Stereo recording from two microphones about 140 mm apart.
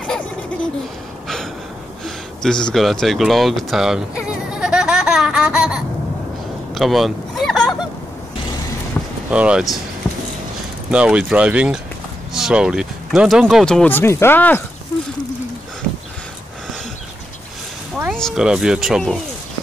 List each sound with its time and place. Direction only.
0.0 s laughter: 5° left (ahead or behind)
1.2 s gasp: centre (ahead or behind)
2.0 s a sound: 5° left (ahead or behind)
9.0 s vehicle: 15° left (ahead or behind)
9.3 s speech: 5° right (ahead or behind)
10.9 s speech: 5° right (ahead or behind); by 14.6 s 15° left (ahead or behind)
18.1 s speech: centre (ahead or behind)